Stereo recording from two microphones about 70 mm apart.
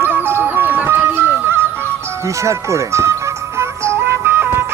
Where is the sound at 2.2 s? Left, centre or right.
Right.